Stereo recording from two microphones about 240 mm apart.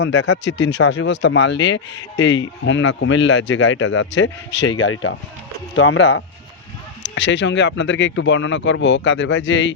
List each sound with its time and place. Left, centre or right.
0.0 s speech: left
7.0 s speech: left